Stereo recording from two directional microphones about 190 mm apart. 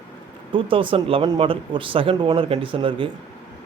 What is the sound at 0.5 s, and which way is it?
A man's voice, 25° right (ahead or behind).